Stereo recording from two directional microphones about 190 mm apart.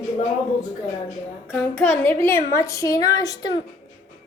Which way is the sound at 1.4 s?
5° left (ahead or behind).